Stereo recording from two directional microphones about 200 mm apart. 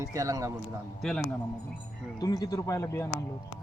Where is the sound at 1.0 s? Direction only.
5° left (ahead or behind).